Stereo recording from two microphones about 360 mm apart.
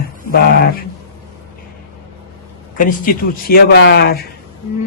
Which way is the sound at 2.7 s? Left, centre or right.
Left.